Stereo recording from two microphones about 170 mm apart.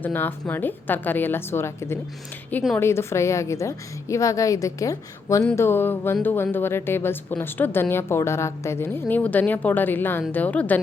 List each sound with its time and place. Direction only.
0.0 s a woman's voice: 10° left (ahead or behind)